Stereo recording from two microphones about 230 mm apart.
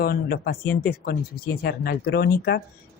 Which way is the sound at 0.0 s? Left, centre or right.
Left.